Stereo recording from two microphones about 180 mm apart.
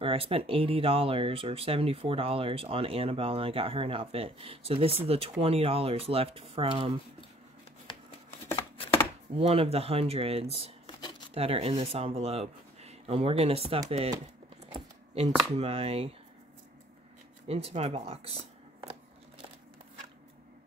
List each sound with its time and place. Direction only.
0.0 s speech: 30° right (ahead or behind)
9.4 s speech: 35° right (ahead or behind)
15.5 s speech: 35° right (ahead or behind)
17.5 s speech: 35° right (ahead or behind)